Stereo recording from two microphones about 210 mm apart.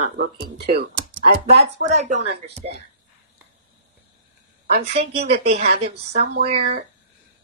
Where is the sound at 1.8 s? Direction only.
35° right (ahead or behind).